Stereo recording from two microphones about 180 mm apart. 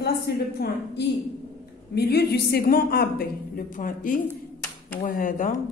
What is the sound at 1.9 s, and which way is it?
A woman's voice, 60° left (ahead or behind).